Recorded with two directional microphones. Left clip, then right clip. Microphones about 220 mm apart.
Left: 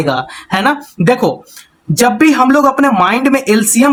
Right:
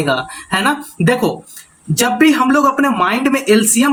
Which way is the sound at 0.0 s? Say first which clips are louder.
Left 2 dB; 25° left (ahead or behind).